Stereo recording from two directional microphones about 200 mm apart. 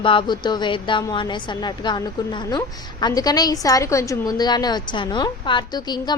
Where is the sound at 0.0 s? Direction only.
25° left (ahead or behind).